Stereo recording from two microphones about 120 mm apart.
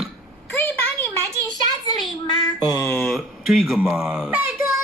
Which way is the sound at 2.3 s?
35° left (ahead or behind).